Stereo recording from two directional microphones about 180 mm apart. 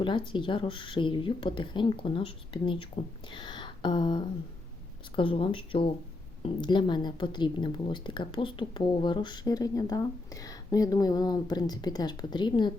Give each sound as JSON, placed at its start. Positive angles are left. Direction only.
{"t": 0.0, "sound": "a woman's voice", "side_deg": 25}